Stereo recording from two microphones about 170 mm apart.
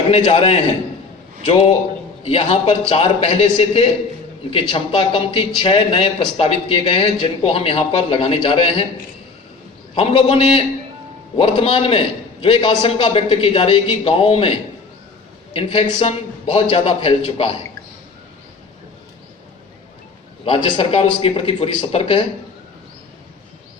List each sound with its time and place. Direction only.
0.1 s speech: 35° left (ahead or behind)
9.9 s speech: 35° left (ahead or behind)
20.4 s speech: 30° left (ahead or behind)